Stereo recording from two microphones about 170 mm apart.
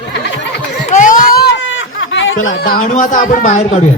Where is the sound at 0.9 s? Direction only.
50° left (ahead or behind); by 2.3 s 90° left.